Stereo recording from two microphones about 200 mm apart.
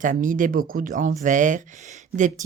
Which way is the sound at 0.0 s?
40° right (ahead or behind).